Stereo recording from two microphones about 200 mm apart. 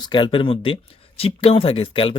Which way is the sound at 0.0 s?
25° left (ahead or behind).